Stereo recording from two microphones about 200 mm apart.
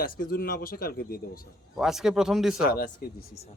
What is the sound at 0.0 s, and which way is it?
Speech, 45° left (ahead or behind).